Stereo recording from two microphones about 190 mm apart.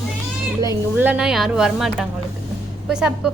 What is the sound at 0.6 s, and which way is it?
Speech, 15° right (ahead or behind).